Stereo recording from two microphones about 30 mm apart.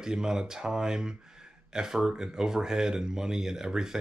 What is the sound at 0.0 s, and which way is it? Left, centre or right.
Speech, right.